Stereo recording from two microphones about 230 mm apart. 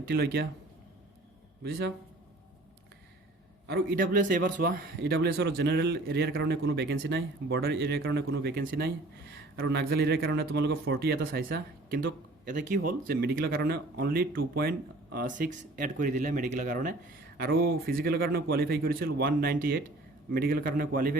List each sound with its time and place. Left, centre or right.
0.1 s speech: right
3.7 s a man's voice: right